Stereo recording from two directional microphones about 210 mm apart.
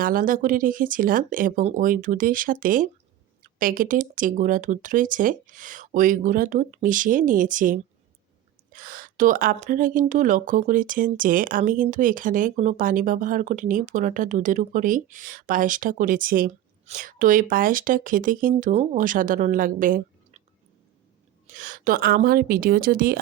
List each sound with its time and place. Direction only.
0.0 s speech: 40° right (ahead or behind)
21.4 s a woman's voice: 40° right (ahead or behind)